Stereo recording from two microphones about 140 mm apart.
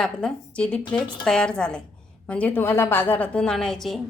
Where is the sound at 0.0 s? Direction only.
5° left (ahead or behind).